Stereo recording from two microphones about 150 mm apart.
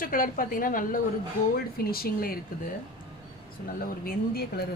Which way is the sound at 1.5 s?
80° left.